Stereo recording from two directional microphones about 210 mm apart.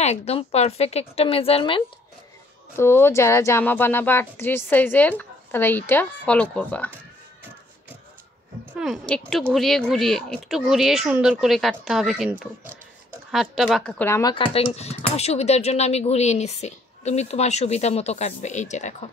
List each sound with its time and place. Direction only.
0.0 s a woman's voice: 30° left (ahead or behind)
2.7 s speech: 10° left (ahead or behind)
8.7 s speech: centre (ahead or behind)
14.3 s speech: 25° left (ahead or behind)